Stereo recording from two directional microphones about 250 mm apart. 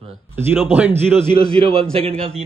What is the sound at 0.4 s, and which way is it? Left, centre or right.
Speech, centre.